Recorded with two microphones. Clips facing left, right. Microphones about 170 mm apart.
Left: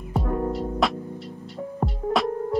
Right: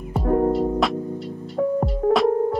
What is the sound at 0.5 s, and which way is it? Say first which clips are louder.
Music: right 5 dB; centre (ahead or behind).